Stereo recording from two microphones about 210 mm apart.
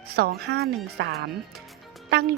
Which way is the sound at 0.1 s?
50° right (ahead or behind).